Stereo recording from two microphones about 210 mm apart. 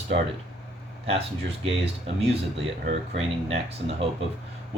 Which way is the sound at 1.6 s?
30° right (ahead or behind).